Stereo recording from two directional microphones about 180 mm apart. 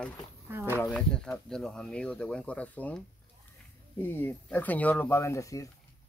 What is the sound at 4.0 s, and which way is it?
Speech, 10° left (ahead or behind).